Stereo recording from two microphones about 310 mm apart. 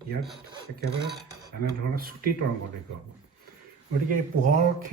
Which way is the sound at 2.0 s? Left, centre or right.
Right.